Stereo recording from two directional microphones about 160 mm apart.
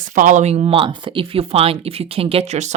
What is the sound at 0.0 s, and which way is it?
Speech, 55° right (ahead or behind).